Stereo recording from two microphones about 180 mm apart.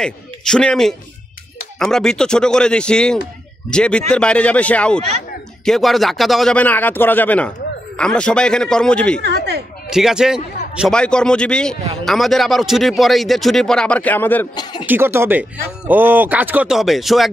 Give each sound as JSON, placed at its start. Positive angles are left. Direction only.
{"t": 0.0, "sound": "a man's voice", "side_deg": 5}
{"t": 9.2, "sound": "speech", "side_deg": -70}
{"t": 9.8, "sound": "a man's voice", "side_deg": -5}
{"t": 14.5, "sound": "speech", "side_deg": 25}
{"t": 14.9, "sound": "speech", "side_deg": -15}